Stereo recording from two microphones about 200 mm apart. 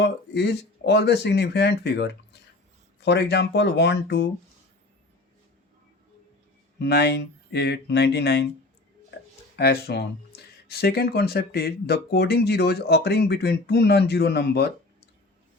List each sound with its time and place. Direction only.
0.0 s speech: 60° left (ahead or behind)
6.7 s speech: 55° left (ahead or behind)
9.6 s speech: 55° left (ahead or behind)